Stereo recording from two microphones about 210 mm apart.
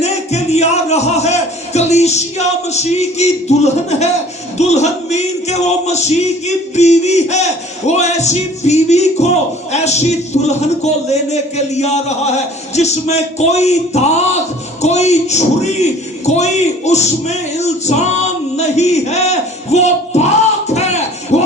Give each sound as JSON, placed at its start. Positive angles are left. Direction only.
{"t": 0.0, "sound": "a man's voice", "side_deg": 30}
{"t": 20.7, "sound": "music", "side_deg": 30}